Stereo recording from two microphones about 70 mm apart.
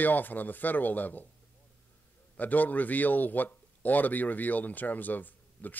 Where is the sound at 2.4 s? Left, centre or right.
Left.